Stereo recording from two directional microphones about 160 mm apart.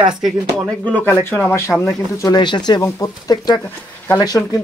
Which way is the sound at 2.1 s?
25° left (ahead or behind).